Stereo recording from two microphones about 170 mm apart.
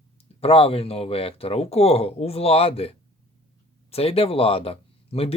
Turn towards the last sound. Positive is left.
turn(degrees=35)  # may be behind; listen again after turning